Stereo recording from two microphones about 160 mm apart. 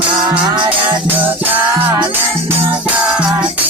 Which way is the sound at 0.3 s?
25° right (ahead or behind).